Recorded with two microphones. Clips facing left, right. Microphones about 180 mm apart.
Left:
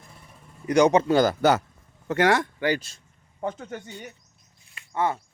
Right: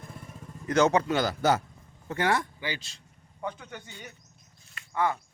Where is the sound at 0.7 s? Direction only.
15° left (ahead or behind).